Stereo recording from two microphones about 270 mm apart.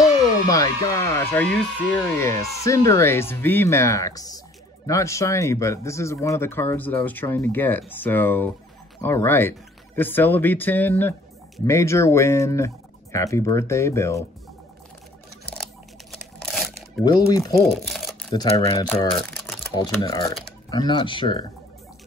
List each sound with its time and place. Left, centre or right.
0.0 s speech: centre
15.5 s crumpling: centre
17.0 s speech: centre
17.6 s a sound: centre
18.3 s speech: centre
19.2 s typing: centre
19.7 s speech: centre